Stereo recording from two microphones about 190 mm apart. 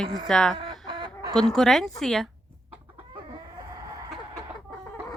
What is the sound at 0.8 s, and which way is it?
Chicken, 25° right (ahead or behind).